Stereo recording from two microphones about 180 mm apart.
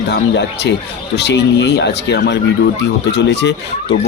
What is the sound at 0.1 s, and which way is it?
Speech, 70° left (ahead or behind).